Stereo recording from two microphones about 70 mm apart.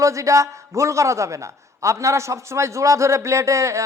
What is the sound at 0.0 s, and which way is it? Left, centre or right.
A man's voice, right.